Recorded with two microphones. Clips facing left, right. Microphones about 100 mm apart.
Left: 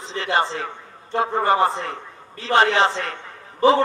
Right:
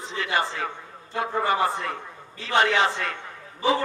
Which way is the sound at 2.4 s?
35° left (ahead or behind).